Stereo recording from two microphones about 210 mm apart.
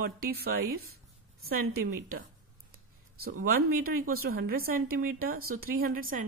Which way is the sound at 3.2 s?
45° right (ahead or behind).